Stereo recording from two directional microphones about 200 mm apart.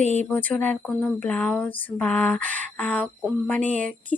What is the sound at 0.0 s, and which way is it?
Speech, 35° right (ahead or behind).